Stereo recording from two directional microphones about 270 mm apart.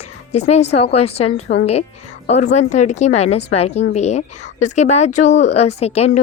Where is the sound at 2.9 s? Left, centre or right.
Left.